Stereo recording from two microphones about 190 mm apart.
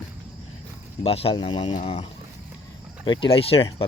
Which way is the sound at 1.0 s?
30° left (ahead or behind).